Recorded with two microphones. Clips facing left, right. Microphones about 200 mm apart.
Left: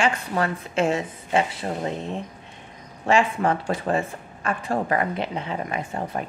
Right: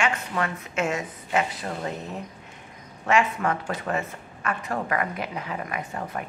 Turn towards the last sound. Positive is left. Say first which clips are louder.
# left 3 dB
turn(degrees=30)  # may be behind; listen again after turning